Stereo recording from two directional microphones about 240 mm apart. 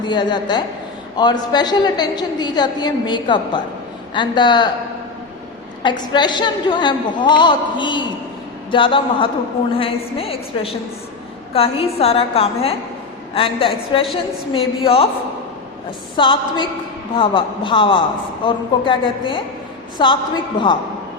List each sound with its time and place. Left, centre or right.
0.0 s a woman's voice: centre
5.8 s a woman's voice: centre
16.1 s a woman's voice: centre